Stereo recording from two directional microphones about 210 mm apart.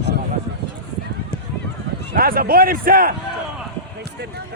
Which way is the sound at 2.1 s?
45° right (ahead or behind).